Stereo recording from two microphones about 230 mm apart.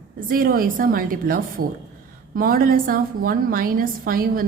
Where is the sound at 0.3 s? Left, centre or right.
Right.